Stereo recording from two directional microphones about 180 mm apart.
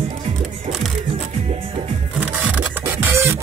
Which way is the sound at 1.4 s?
35° right (ahead or behind).